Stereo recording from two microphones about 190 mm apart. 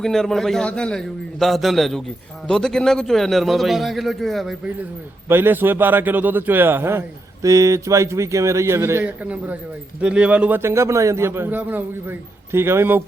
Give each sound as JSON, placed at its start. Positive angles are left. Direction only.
{"t": 0.0, "sound": "a man's voice", "side_deg": 0}
{"t": 5.3, "sound": "a man's voice", "side_deg": -10}